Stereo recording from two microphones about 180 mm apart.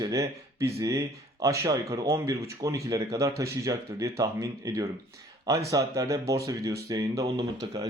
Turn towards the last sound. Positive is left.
turn(degrees=-20)  # may be behind; listen again after turning